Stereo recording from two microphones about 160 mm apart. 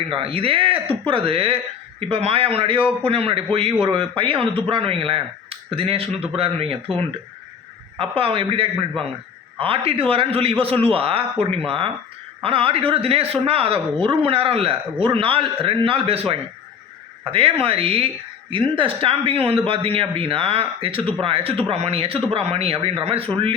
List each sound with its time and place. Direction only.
0.1 s speech: 35° right (ahead or behind)